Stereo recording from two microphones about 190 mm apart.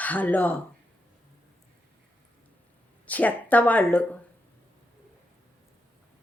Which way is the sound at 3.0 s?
10° left (ahead or behind).